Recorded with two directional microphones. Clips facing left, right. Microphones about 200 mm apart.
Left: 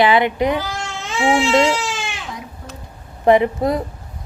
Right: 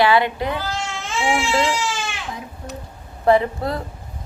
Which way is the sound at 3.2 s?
20° left (ahead or behind).